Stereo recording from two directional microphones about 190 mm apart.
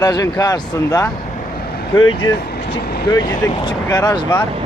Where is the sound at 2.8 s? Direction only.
55° left (ahead or behind).